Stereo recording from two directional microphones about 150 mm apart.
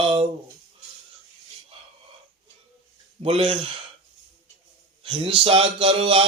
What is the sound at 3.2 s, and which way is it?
Speech, 40° right (ahead or behind).